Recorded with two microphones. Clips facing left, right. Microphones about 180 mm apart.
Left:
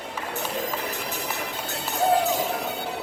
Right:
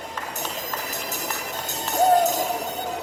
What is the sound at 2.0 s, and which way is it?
Music, 40° right (ahead or behind).